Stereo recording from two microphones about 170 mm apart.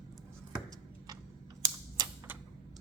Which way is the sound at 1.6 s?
15° right (ahead or behind).